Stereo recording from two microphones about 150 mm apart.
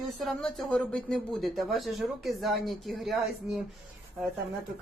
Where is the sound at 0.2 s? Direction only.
5° left (ahead or behind).